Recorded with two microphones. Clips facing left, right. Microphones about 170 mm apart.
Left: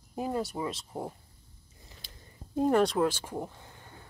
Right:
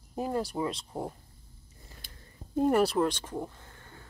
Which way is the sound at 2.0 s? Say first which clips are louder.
Even; 55° right (ahead or behind).